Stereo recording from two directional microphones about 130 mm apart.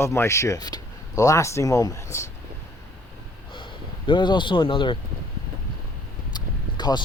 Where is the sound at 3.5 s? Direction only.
40° left (ahead or behind).